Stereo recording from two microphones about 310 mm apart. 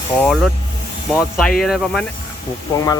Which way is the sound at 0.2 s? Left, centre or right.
Centre.